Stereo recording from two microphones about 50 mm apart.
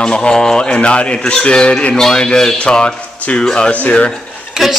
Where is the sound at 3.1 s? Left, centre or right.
Left.